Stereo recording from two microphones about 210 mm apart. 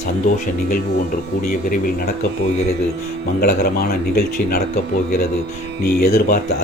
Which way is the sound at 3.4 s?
45° left (ahead or behind).